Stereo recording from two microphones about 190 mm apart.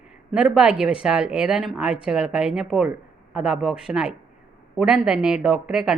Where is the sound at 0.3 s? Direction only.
5° right (ahead or behind).